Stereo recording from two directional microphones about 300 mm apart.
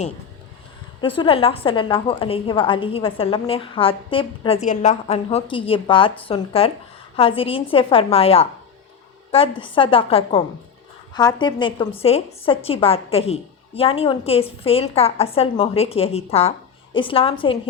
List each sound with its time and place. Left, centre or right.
1.0 s a woman's voice: centre